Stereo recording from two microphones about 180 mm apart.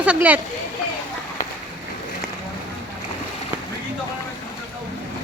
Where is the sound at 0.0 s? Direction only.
10° right (ahead or behind).